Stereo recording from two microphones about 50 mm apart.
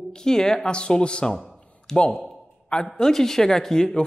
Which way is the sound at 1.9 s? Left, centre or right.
Left.